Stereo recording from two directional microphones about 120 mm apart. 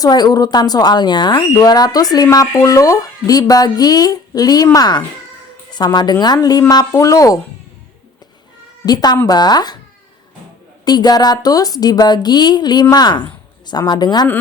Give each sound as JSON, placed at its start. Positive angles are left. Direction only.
{"t": 0.0, "sound": "speech", "side_deg": 35}
{"t": 8.9, "sound": "speech", "side_deg": 35}
{"t": 10.8, "sound": "speech", "side_deg": 35}